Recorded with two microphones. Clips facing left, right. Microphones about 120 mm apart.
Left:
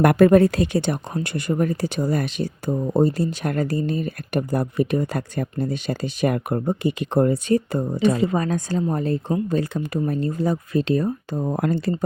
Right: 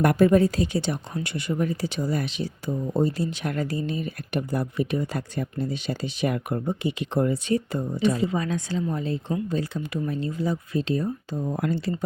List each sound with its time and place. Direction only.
0.0 s speech: 65° left (ahead or behind); by 7.9 s 45° left (ahead or behind)
8.0 s speech: 60° left (ahead or behind)
8.4 s speech: 45° left (ahead or behind)